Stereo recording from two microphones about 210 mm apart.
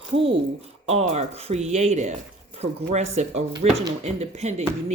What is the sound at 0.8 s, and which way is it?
Speech, 30° right (ahead or behind).